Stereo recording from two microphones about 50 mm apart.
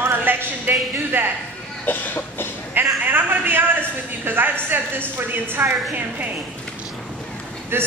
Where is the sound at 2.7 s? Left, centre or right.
Right.